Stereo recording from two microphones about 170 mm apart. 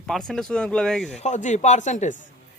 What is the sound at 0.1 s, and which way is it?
Speech, 5° left (ahead or behind).